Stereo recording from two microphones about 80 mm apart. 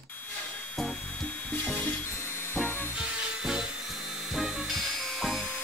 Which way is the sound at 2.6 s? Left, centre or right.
Left.